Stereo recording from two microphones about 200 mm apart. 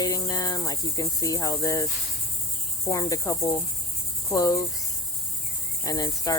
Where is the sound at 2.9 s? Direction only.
15° left (ahead or behind).